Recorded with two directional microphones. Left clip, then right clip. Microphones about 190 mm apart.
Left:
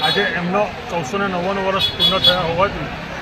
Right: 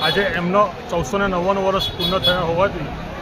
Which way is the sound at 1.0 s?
30° right (ahead or behind).